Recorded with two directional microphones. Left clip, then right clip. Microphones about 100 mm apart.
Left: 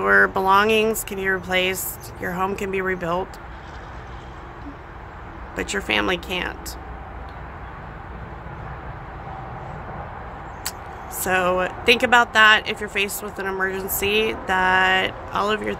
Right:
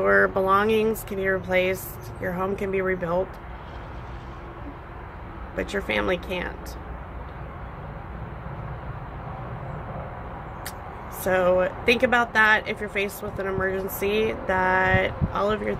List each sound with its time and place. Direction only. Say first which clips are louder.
0.0 s speech: left 3 dB; 30° left (ahead or behind)
5.6 s speech: left 3 dB; 30° left (ahead or behind)
11.2 s speech: even; 30° left (ahead or behind)